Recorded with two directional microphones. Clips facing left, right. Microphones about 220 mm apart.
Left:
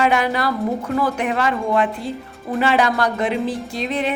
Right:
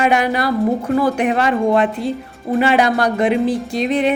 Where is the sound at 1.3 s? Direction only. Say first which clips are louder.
Right 4 dB; 25° right (ahead or behind).